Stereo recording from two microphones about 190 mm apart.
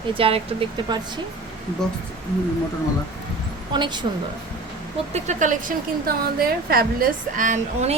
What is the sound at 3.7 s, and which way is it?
Speech, 25° right (ahead or behind).